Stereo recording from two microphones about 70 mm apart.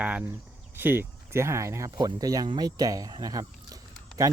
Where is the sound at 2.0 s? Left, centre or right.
Right.